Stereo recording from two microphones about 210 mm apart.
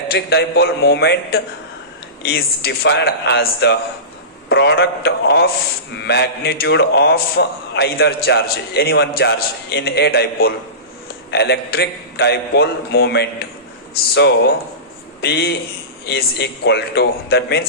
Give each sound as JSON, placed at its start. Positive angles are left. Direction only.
{"t": 0.1, "sound": "a man's voice", "side_deg": 50}